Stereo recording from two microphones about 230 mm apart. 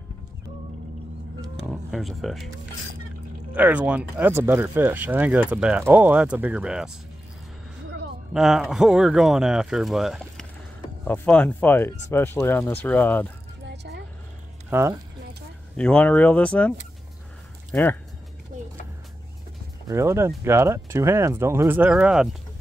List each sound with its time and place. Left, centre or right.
1.7 s speech: centre
3.5 s speech: centre
8.3 s speech: centre
13.7 s vehicle: right
14.7 s speech: centre
15.7 s speech: centre
19.9 s speech: centre